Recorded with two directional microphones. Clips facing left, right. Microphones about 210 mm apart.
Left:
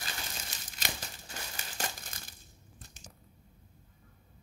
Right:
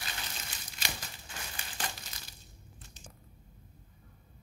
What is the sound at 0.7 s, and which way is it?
Crumpling, 40° left (ahead or behind).